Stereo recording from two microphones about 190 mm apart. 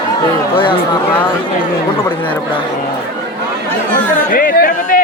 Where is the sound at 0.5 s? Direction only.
25° left (ahead or behind).